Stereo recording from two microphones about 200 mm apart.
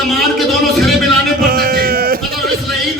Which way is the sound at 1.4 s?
50° right (ahead or behind).